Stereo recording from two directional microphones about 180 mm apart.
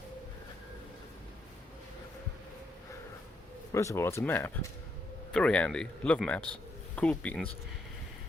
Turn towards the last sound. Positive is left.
turn(degrees=10)  # may be behind; listen again after turning